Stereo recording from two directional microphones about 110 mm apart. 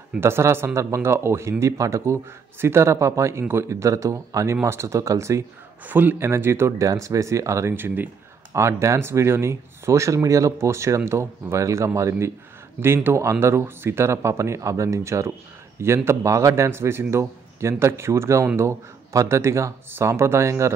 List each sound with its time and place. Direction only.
0.2 s speech: 20° right (ahead or behind)
5.9 s speech: 15° right (ahead or behind)